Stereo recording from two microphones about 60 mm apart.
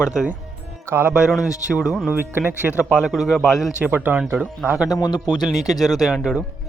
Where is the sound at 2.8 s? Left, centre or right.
Centre.